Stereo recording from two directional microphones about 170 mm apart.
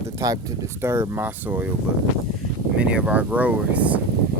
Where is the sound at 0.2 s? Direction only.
20° right (ahead or behind).